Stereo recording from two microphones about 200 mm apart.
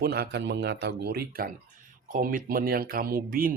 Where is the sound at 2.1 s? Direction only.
45° right (ahead or behind).